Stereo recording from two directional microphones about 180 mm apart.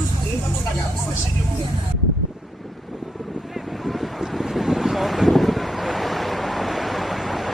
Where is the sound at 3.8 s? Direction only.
Centre (ahead or behind).